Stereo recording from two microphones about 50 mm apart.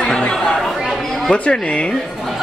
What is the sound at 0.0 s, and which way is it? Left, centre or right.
Chatter, centre.